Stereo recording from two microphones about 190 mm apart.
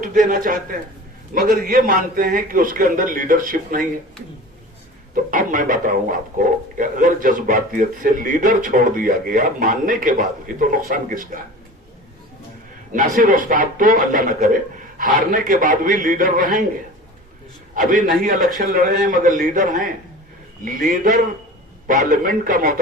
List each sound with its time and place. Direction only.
0.0 s speech: 45° right (ahead or behind)
5.1 s speech: 45° right (ahead or behind)
12.9 s speech: 45° right (ahead or behind)
17.7 s speech: 45° right (ahead or behind)